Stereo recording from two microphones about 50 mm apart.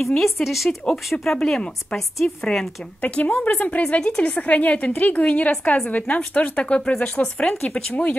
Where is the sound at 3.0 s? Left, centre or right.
Left.